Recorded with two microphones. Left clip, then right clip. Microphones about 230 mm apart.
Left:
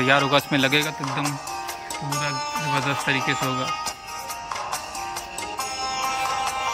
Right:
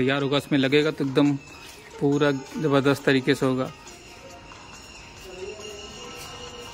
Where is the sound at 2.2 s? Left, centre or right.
Right.